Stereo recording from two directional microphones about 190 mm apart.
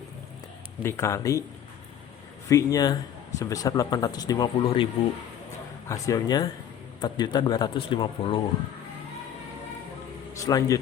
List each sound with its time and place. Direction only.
0.8 s speech: 15° left (ahead or behind)
2.5 s speech: 15° left (ahead or behind)
5.9 s speech: 20° left (ahead or behind)
10.4 s speech: 15° left (ahead or behind)